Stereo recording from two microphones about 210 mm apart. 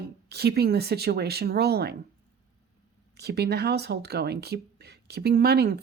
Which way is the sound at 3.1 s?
50° right (ahead or behind).